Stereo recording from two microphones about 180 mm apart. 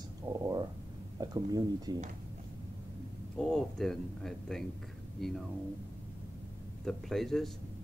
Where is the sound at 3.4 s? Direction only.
Centre (ahead or behind).